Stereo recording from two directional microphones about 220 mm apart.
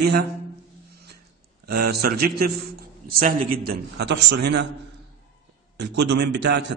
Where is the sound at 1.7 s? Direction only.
45° right (ahead or behind).